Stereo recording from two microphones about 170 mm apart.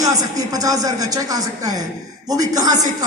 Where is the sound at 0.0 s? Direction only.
20° right (ahead or behind).